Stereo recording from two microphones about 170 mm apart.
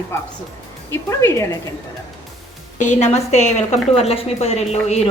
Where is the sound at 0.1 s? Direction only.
15° left (ahead or behind).